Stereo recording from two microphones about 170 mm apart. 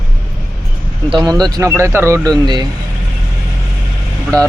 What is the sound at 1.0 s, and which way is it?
Speech, 25° right (ahead or behind).